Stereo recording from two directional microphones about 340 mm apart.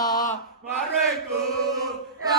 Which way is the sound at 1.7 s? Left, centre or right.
Centre.